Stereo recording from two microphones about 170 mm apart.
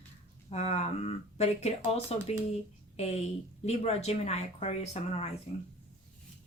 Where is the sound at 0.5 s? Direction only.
40° left (ahead or behind).